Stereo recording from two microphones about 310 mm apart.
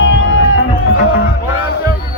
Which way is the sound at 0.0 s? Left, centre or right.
Left.